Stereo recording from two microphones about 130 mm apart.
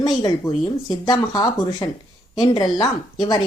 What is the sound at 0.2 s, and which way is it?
Speech, 30° left (ahead or behind).